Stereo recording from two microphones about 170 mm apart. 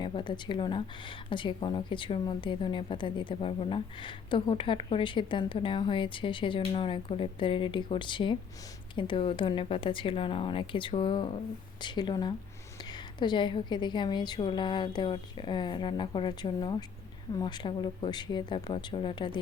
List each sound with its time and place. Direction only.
0.0 s speech: 30° left (ahead or behind)